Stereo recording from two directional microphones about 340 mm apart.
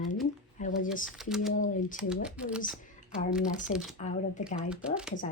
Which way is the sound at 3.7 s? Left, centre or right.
Centre.